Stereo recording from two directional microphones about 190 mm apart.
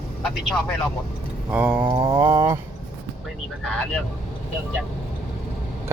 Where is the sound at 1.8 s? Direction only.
20° right (ahead or behind).